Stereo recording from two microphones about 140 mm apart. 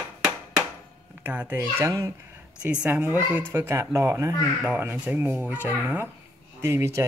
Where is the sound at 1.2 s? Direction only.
15° right (ahead or behind).